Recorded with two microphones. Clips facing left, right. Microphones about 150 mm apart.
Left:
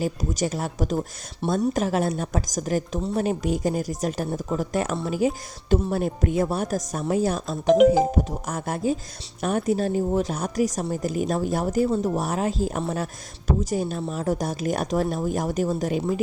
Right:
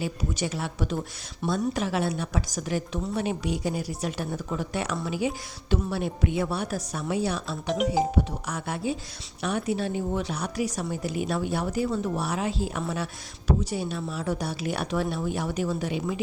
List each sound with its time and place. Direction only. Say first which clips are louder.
0.0 s speech: left 4 dB; 40° left (ahead or behind)